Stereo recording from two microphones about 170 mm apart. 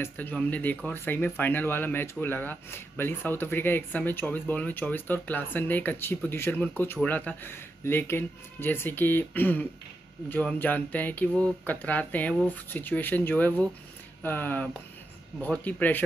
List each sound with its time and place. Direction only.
0.0 s speech: 10° left (ahead or behind)